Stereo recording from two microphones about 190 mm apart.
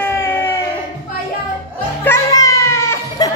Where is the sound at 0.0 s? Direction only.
10° left (ahead or behind).